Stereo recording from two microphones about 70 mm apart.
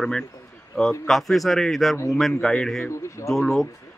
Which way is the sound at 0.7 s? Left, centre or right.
Centre.